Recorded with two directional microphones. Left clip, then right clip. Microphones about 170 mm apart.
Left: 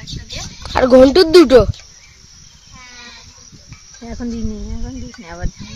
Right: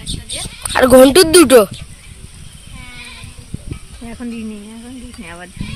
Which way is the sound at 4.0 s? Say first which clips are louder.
Left 2 dB; 25° left (ahead or behind).